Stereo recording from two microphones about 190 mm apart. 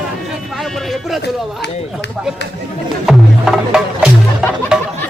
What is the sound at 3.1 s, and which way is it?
Music, centre (ahead or behind).